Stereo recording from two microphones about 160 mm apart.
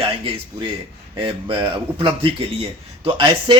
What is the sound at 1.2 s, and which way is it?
Speech, 35° right (ahead or behind).